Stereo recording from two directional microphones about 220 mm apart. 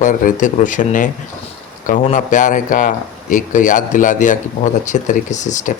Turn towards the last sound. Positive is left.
turn(degrees=35)  # may be behind; listen again after turning